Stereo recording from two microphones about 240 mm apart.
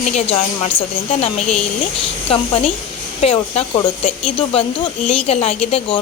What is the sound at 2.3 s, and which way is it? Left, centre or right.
A woman's voice, left.